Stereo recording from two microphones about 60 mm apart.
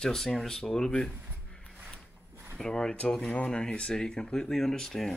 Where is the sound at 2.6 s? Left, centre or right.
Centre.